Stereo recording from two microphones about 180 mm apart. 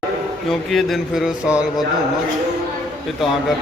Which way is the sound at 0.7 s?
Centre (ahead or behind).